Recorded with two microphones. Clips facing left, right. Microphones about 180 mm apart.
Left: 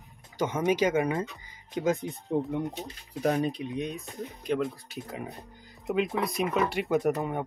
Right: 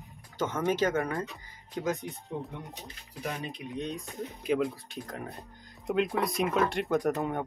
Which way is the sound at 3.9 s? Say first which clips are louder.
Even; centre (ahead or behind).